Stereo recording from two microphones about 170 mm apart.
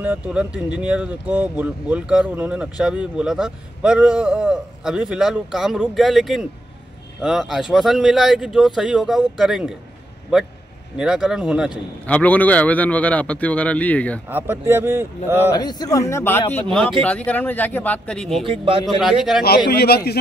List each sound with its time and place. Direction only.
0.0 s speech: 10° right (ahead or behind)
12.1 s a man's voice: 10° left (ahead or behind)
14.3 s speech: 15° right (ahead or behind)
15.5 s a man's voice: 25° left (ahead or behind); by 18.4 s 5° left (ahead or behind)
18.4 s a man's voice: 30° right (ahead or behind)
19.7 s a man's voice: 65° left (ahead or behind)